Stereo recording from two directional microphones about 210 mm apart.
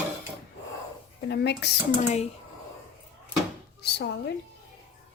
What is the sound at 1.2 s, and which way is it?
Speech, 55° left (ahead or behind).